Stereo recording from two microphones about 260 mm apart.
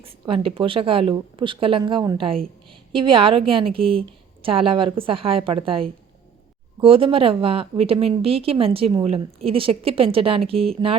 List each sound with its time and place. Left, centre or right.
0.0 s a woman's voice: right